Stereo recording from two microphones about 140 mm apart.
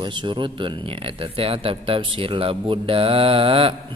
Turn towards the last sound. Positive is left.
turn(degrees=-40)  # may be behind; listen again after turning